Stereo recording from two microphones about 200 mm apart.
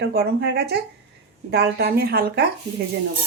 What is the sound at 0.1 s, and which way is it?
A woman's voice, 55° right (ahead or behind).